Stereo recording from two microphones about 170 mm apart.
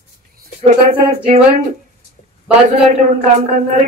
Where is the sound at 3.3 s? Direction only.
45° right (ahead or behind).